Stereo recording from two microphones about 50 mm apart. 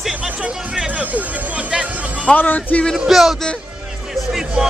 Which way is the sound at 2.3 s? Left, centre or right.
Left.